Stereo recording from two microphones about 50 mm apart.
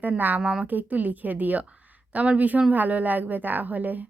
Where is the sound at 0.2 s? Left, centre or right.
Right.